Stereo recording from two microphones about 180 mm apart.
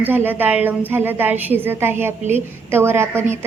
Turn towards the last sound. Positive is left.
turn(degrees=-15)  # may be behind; listen again after turning